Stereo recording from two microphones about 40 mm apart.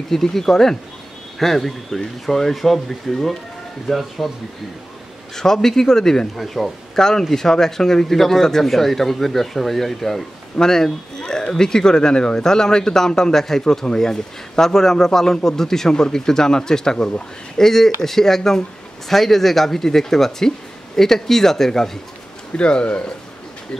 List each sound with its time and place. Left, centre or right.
0.1 s speech: centre
5.3 s speech: centre
22.6 s speech: left